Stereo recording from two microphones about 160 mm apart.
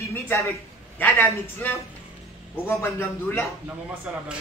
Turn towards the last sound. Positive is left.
turn(degrees=15)  # may be behind; listen again after turning